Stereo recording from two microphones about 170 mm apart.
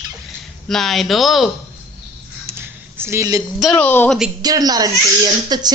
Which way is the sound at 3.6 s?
5° left (ahead or behind).